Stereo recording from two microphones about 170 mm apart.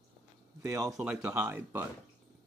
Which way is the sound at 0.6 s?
15° right (ahead or behind).